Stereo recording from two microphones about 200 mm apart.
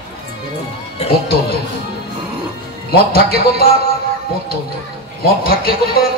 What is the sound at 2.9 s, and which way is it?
Speech, 50° left (ahead or behind).